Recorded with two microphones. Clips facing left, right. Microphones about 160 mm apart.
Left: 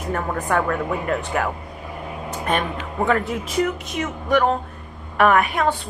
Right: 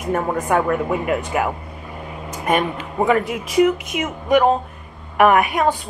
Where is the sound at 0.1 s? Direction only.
15° right (ahead or behind).